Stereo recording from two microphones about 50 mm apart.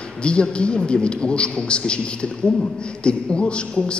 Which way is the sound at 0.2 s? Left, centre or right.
Centre.